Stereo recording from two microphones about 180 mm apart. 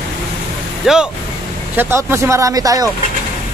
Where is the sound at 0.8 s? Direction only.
5° right (ahead or behind); by 2.9 s 20° right (ahead or behind).